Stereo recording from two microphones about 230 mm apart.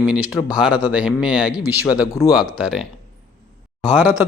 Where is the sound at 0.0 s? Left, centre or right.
Centre.